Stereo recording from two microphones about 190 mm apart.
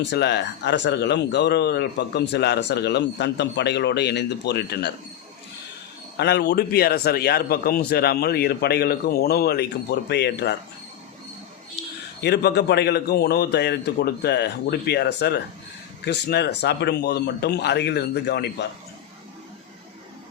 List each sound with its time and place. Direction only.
0.0 s speech: 65° left (ahead or behind)
6.1 s speech: 60° left (ahead or behind)
12.2 s speech: 60° left (ahead or behind)